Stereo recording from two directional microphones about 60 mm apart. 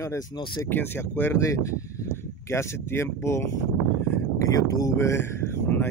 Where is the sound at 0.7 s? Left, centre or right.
Left.